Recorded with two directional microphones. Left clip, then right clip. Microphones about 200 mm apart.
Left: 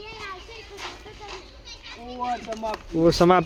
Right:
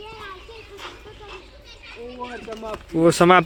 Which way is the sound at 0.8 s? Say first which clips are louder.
Left 2 dB; 10° left (ahead or behind).